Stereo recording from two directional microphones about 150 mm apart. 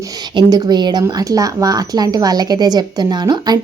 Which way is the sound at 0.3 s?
25° right (ahead or behind).